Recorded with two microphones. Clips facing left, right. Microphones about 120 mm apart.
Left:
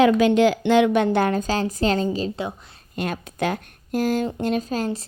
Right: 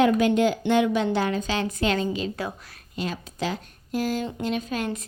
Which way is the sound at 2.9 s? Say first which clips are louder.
Left 4 dB; 55° left (ahead or behind).